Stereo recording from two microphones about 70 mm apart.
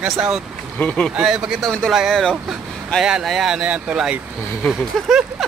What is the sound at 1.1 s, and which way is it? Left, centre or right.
Speech, centre.